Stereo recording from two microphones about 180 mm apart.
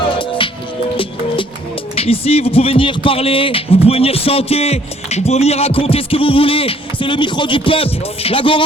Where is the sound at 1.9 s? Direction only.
35° left (ahead or behind).